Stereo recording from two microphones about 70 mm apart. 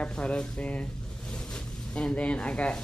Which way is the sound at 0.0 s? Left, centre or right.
Centre.